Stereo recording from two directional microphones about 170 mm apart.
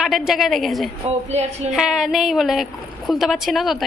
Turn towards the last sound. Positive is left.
turn(degrees=0)  # may be behind; listen again after turning